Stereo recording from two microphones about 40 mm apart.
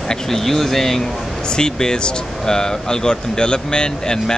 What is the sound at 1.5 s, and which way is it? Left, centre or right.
Speech, centre.